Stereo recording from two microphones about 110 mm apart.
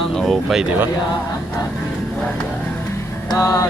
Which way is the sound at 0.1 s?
5° left (ahead or behind).